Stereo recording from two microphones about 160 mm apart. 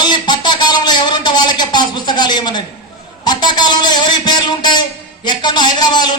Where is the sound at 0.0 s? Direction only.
25° left (ahead or behind).